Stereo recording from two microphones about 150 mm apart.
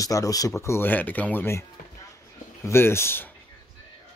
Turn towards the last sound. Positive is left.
turn(degrees=15)  # may be behind; listen again after turning